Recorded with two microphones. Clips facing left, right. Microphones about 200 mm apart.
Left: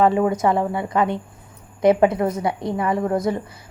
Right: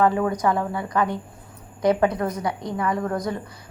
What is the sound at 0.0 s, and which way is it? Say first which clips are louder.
A woman's voice: left 3 dB; 25° left (ahead or behind).